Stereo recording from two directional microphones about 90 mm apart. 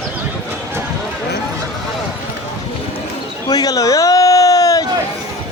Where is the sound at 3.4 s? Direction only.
45° left (ahead or behind).